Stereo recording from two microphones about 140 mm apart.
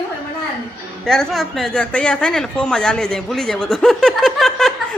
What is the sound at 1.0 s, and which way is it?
Speech, 5° left (ahead or behind).